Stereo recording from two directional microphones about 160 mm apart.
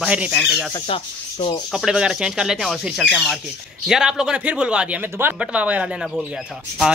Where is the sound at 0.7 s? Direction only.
30° left (ahead or behind).